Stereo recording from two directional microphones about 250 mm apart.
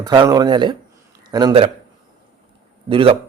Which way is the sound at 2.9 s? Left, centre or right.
Right.